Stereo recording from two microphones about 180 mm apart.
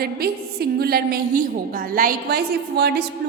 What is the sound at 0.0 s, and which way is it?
A woman's voice, 60° right (ahead or behind).